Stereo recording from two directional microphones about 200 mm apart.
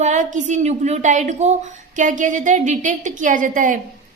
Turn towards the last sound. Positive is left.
turn(degrees=-40)  # may be behind; listen again after turning